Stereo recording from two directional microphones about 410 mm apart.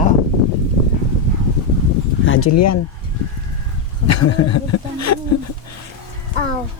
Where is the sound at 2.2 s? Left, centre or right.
Left.